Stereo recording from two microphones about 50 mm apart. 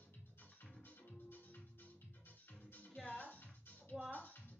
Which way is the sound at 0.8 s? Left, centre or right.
Left.